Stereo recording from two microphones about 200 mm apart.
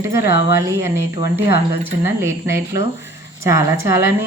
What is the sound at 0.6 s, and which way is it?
Speech, 15° right (ahead or behind).